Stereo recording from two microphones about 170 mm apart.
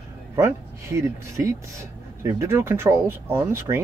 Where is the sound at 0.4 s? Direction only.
15° right (ahead or behind).